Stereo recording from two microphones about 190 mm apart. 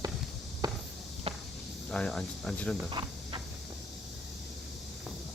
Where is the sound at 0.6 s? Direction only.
20° right (ahead or behind).